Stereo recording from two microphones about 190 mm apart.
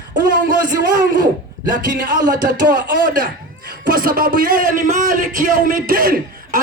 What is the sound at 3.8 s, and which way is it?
A man's voice, 50° right (ahead or behind).